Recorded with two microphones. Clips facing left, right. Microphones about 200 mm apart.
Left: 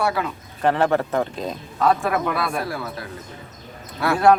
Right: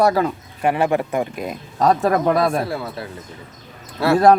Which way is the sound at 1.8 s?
40° right (ahead or behind).